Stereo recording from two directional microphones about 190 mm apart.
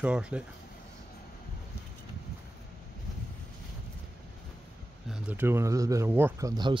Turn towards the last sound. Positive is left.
turn(degrees=-10)  # may be behind; listen again after turning